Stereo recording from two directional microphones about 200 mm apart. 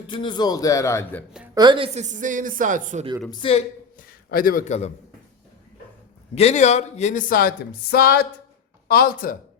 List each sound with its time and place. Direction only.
0.1 s a man's voice: 25° left (ahead or behind)
1.5 s a woman's voice: 25° right (ahead or behind); by 3.1 s 40° right (ahead or behind)
3.2 s speech: 25° left (ahead or behind)
3.9 s a man's voice: 45° left (ahead or behind)
6.3 s speech: 30° left (ahead or behind)